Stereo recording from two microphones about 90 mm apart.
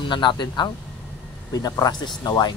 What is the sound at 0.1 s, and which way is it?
Speech, 60° left (ahead or behind).